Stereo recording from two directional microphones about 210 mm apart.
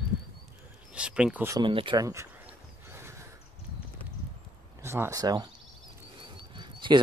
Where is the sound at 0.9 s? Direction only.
5° right (ahead or behind).